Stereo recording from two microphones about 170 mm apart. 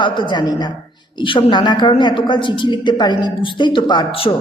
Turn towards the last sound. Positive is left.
turn(degrees=25)  # may be behind; listen again after turning